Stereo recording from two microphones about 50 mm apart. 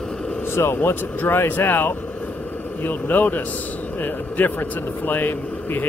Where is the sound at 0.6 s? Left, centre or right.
Left.